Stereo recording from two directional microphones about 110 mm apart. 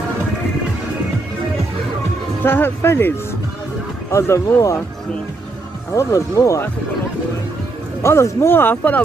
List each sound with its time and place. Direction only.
2.4 s speech: 20° left (ahead or behind)
5.9 s speech: 30° left (ahead or behind)
8.0 s speech: 25° left (ahead or behind)